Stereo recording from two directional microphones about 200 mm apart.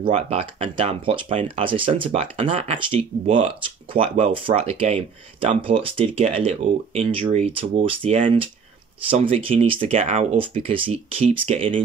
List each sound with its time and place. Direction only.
0.0 s speech: 30° right (ahead or behind)